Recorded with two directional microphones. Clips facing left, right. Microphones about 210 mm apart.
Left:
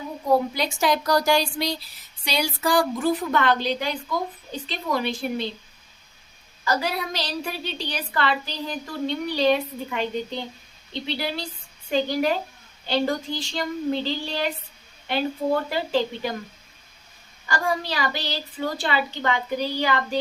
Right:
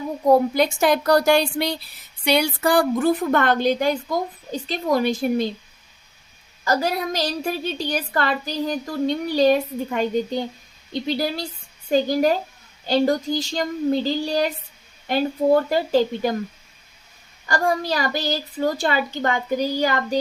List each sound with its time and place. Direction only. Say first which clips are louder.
0.3 s a woman's voice: right 5 dB; 50° right (ahead or behind)
6.7 s a woman's voice: right 4 dB; 45° right (ahead or behind)
17.5 s a woman's voice: right 4 dB; 45° right (ahead or behind)